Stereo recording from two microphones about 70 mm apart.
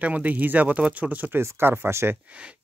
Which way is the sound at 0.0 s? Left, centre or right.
Right.